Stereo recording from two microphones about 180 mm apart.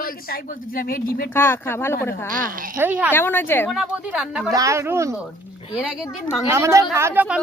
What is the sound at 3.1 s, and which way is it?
Speech, 10° left (ahead or behind).